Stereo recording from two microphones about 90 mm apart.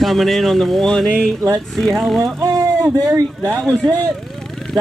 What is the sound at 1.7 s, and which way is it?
Speech, centre (ahead or behind).